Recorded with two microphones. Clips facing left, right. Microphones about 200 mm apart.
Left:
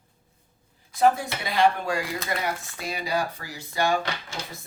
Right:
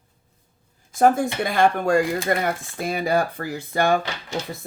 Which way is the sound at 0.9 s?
50° right (ahead or behind).